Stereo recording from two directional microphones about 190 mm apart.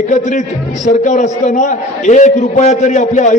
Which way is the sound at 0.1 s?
40° left (ahead or behind).